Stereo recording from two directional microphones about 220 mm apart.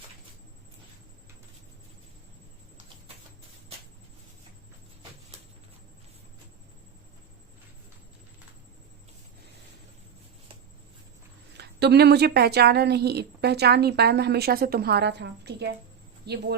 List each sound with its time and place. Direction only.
11.5 s a woman's voice: 50° right (ahead or behind)